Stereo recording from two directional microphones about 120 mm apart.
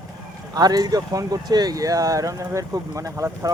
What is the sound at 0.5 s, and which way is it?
Speech, 35° right (ahead or behind).